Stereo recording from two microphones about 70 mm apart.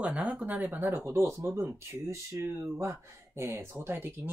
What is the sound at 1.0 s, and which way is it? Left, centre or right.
Speech, right.